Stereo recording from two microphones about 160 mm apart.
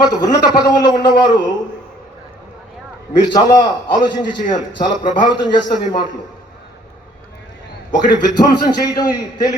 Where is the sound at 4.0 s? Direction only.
30° left (ahead or behind).